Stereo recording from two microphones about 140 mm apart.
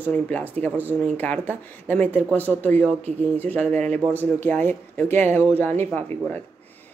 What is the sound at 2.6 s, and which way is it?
A woman's voice, 10° left (ahead or behind).